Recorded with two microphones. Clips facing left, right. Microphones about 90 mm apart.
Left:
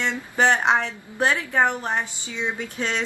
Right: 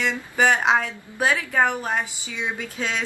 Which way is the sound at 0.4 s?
10° right (ahead or behind).